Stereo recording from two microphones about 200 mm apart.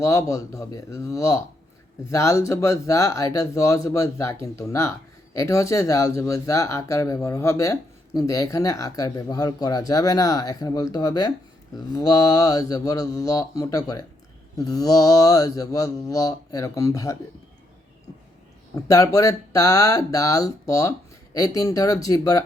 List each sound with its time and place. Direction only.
0.0 s speech: 15° left (ahead or behind)
18.7 s speech: 15° left (ahead or behind)